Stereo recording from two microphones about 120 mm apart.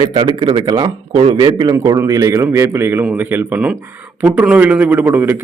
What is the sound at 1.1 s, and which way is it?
Speech, 50° right (ahead or behind).